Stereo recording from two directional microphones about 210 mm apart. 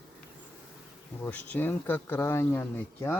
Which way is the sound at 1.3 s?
5° left (ahead or behind).